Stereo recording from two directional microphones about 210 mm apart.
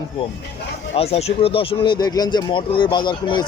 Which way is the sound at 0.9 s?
30° left (ahead or behind).